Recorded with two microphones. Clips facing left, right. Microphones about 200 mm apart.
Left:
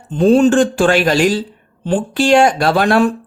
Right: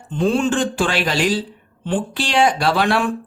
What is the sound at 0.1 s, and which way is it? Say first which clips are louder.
Speech: left 8 dB; 40° left (ahead or behind).